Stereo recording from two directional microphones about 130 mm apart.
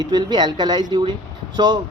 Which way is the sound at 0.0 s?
35° right (ahead or behind).